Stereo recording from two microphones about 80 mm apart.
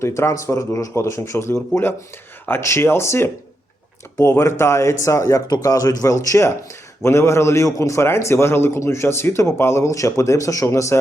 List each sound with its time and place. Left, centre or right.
0.0 s a man's voice: left